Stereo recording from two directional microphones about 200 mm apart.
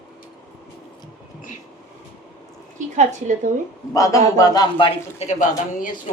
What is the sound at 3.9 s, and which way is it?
A man's voice, 15° left (ahead or behind).